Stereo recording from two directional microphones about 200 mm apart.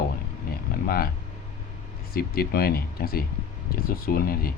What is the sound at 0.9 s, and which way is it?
Speech, 50° left (ahead or behind).